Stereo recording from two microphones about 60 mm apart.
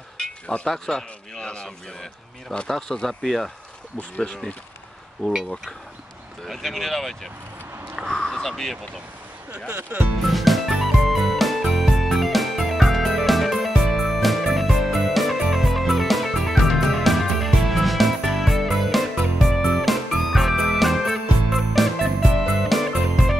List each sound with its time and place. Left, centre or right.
0.2 s speech: centre
2.7 s speech: centre
6.4 s speech: centre
7.9 s a sound: centre
8.2 s speech: centre
9.9 s speech: right
10.2 s music: centre